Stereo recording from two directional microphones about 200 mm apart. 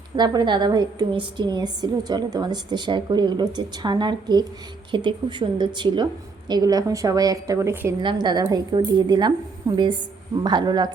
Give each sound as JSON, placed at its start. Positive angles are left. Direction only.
{"t": 0.2, "sound": "a woman's voice", "side_deg": -20}